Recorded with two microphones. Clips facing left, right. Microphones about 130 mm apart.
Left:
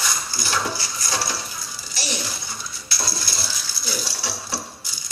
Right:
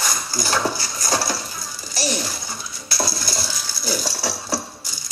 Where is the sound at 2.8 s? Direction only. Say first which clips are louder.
Right 6 dB; 45° right (ahead or behind).